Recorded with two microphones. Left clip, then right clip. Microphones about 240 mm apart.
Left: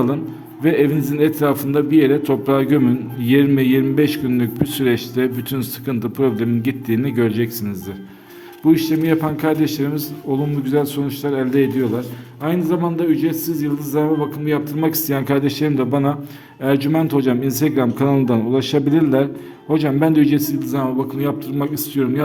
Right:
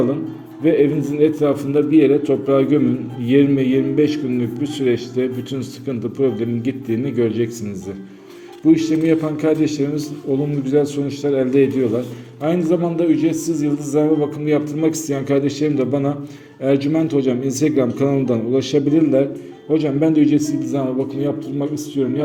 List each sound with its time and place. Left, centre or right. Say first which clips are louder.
0.6 s a man's voice: right 1 dB; left